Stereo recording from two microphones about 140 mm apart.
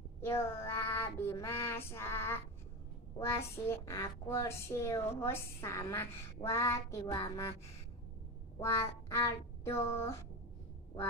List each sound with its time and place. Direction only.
0.2 s child singing: 15° left (ahead or behind)
3.2 s a woman's voice: 20° left (ahead or behind)